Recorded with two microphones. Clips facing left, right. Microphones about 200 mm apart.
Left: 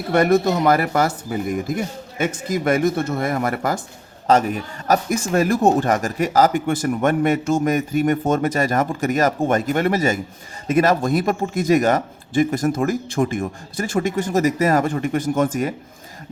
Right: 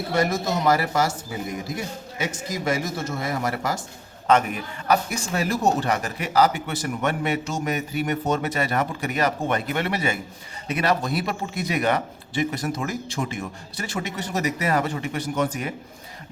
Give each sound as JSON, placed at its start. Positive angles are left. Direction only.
{"t": 0.1, "sound": "speech", "side_deg": 60}
{"t": 4.3, "sound": "a man's voice", "side_deg": 35}